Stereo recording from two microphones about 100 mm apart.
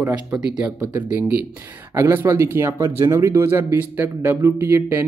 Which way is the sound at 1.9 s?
30° right (ahead or behind).